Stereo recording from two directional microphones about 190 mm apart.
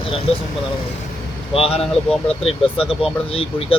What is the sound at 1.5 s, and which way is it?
Speech, 30° left (ahead or behind).